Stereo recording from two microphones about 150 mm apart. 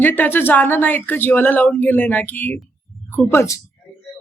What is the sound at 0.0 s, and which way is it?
Speech, 15° left (ahead or behind).